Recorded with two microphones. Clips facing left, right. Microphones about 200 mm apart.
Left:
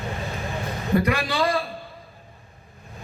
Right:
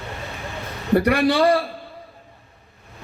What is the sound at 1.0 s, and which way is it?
Speech, 70° right (ahead or behind).